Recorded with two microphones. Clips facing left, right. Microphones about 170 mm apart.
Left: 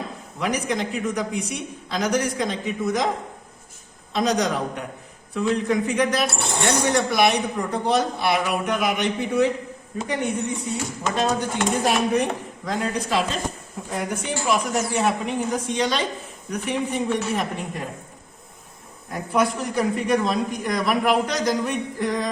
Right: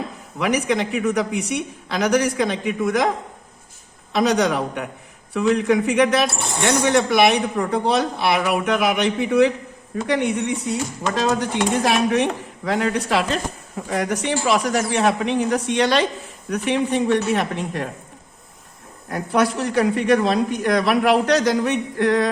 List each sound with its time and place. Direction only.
0.3 s speech: 70° right (ahead or behind)
4.1 s speech: 65° right (ahead or behind)
10.1 s speech: 80° right
11.1 s speech: 90° right; by 13.4 s 70° right (ahead or behind)
13.9 s speech: 85° right
19.1 s speech: 75° right (ahead or behind)